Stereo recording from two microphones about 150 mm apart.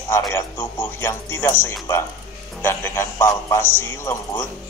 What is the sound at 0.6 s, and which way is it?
A man's voice, 15° left (ahead or behind).